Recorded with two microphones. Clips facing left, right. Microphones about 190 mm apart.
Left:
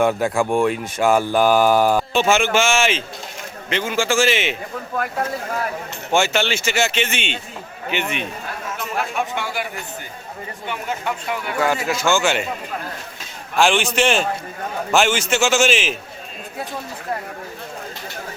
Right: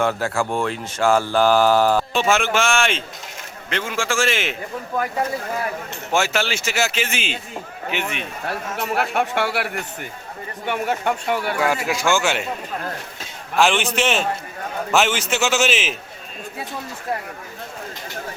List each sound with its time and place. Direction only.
0.0 s speech: 15° left (ahead or behind)
2.1 s speech: centre (ahead or behind)
6.1 s speech: centre (ahead or behind)
8.4 s a man's voice: 70° right (ahead or behind)
10.7 s speech: 55° right (ahead or behind)
11.6 s speech: 10° right (ahead or behind)
13.6 s speech: centre (ahead or behind)